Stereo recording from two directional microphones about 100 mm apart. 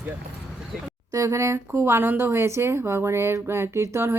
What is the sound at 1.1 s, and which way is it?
Speech, 30° right (ahead or behind).